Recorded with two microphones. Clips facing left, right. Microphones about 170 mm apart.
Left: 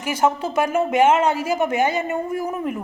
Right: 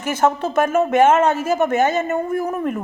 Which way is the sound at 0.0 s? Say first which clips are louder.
Right 2 dB; 10° left (ahead or behind).